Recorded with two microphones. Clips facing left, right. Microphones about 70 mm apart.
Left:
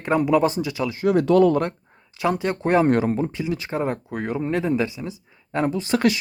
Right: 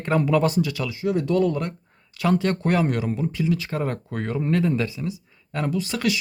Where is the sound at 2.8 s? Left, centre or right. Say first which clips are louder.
Left 5 dB; left.